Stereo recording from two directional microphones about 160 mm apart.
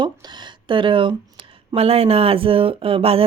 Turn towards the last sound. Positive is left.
turn(degrees=-35)  # may be behind; listen again after turning